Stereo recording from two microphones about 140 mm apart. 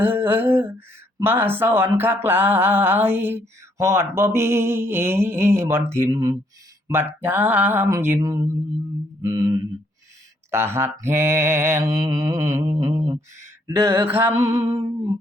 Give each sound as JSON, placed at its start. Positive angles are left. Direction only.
{"t": 0.0, "sound": "mantra", "side_deg": -15}
{"t": 9.2, "sound": "a sound", "side_deg": -25}
{"t": 10.5, "sound": "mantra", "side_deg": -15}